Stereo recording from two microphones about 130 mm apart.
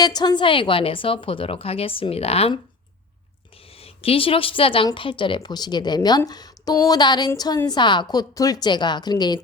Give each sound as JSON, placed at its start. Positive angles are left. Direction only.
{"t": 0.0, "sound": "a woman's voice", "side_deg": 30}